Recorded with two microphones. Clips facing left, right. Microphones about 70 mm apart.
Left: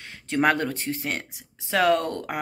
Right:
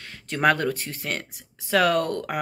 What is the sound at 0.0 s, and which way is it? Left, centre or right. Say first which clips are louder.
Speech: even; left.